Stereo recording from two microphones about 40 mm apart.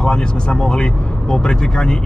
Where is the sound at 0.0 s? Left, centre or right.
Left.